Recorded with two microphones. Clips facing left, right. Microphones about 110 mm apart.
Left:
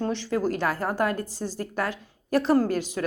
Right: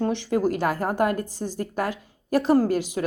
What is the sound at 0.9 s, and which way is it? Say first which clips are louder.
Speech: right 4 dB; 50° right (ahead or behind).